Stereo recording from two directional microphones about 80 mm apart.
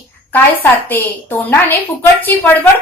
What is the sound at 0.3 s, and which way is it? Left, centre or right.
A woman's voice, left.